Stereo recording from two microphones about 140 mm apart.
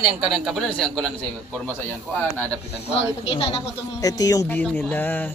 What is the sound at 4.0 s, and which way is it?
Speech, 25° left (ahead or behind).